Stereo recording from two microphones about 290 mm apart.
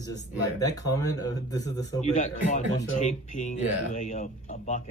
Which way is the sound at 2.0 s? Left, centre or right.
Left.